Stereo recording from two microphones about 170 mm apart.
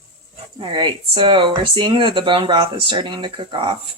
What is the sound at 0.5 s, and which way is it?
Speech, 30° right (ahead or behind).